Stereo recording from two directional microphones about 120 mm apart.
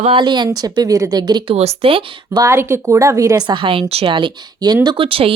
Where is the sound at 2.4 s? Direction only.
25° right (ahead or behind).